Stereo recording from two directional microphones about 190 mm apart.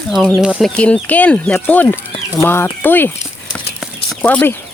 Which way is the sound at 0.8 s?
5° left (ahead or behind).